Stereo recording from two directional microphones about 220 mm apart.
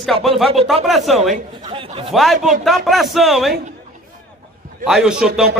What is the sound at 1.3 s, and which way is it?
Speech, 25° right (ahead or behind).